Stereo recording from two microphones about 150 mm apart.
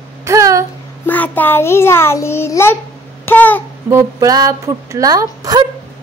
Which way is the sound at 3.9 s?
25° right (ahead or behind).